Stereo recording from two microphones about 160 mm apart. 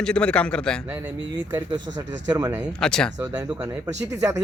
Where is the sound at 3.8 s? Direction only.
20° right (ahead or behind).